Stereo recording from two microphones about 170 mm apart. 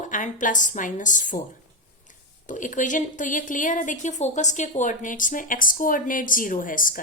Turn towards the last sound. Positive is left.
turn(degrees=50)  # may be behind; listen again after turning